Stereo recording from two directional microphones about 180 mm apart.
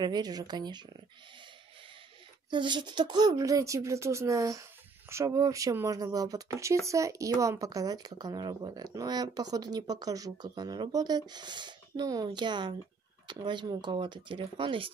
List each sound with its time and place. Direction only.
0.0 s speech: 20° right (ahead or behind)
2.5 s speech: 25° right (ahead or behind)